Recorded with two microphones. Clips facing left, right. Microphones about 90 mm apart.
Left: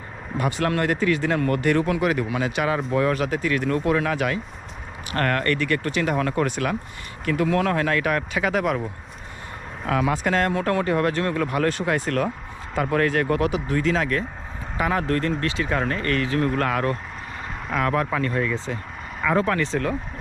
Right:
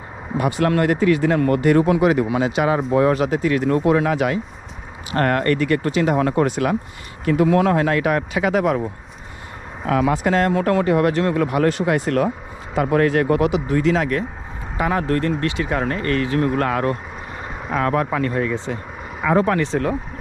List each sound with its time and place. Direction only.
0.3 s speech: 20° right (ahead or behind)
9.8 s speech: 35° right (ahead or behind)
13.7 s speech: 35° right (ahead or behind)